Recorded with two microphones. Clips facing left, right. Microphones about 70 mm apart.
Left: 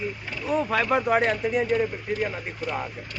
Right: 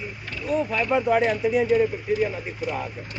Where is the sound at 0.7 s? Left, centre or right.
Left.